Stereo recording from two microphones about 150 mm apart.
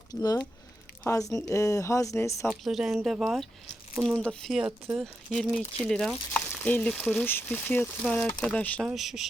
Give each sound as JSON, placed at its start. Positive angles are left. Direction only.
{"t": 0.1, "sound": "speech", "side_deg": 25}
{"t": 2.5, "sound": "speech", "side_deg": 0}
{"t": 6.5, "sound": "speech", "side_deg": 15}
{"t": 8.9, "sound": "speech", "side_deg": 0}